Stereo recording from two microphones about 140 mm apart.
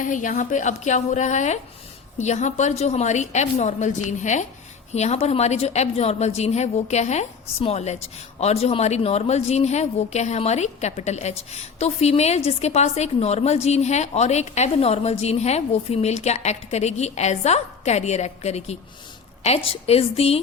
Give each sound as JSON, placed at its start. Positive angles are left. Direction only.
{"t": 0.0, "sound": "a woman's voice", "side_deg": 65}